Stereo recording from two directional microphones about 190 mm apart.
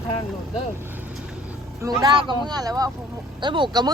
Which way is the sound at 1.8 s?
20° right (ahead or behind).